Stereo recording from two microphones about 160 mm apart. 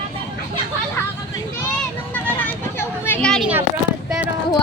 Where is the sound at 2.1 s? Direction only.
10° left (ahead or behind).